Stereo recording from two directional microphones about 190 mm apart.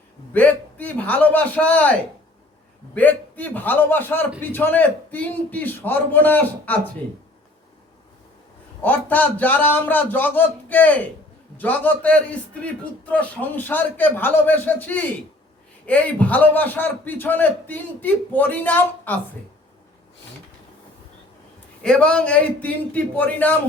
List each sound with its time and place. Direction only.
0.3 s a man's voice: 10° left (ahead or behind)
8.8 s a man's voice: 10° left (ahead or behind)
21.8 s a man's voice: 5° left (ahead or behind)